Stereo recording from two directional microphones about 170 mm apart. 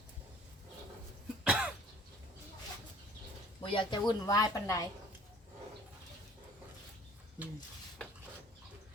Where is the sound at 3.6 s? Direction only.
30° left (ahead or behind).